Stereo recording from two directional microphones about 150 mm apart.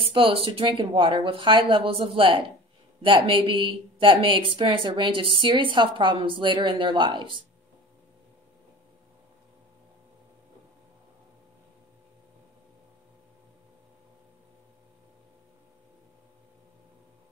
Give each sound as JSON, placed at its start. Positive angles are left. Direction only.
{"t": 0.0, "sound": "a woman's voice", "side_deg": -35}